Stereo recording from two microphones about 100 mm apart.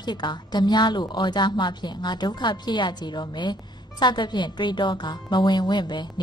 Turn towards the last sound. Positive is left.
turn(degrees=50)  # may be behind; listen again after turning